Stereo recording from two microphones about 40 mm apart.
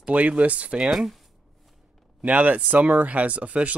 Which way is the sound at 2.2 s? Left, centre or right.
Right.